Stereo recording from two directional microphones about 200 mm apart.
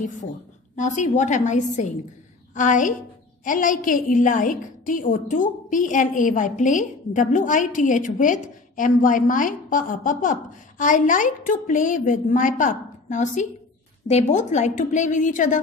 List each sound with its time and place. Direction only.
0.7 s a woman's voice: 40° left (ahead or behind)